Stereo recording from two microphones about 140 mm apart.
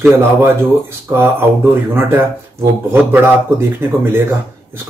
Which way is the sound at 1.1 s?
15° right (ahead or behind).